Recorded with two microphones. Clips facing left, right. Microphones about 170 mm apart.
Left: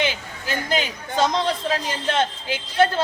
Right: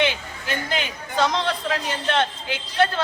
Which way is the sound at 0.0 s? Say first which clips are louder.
Right 2 dB; 35° left (ahead or behind).